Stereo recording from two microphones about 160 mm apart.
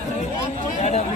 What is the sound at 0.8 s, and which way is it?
Chatter, 45° left (ahead or behind).